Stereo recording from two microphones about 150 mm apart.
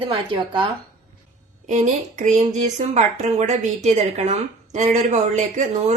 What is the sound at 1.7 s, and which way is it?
A woman's voice, 55° right (ahead or behind).